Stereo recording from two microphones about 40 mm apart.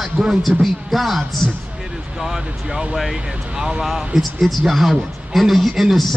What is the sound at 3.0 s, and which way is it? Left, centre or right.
A man's voice, centre.